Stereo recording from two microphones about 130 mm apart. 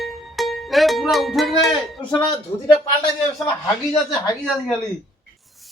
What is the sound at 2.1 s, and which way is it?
A man's voice, 35° left (ahead or behind).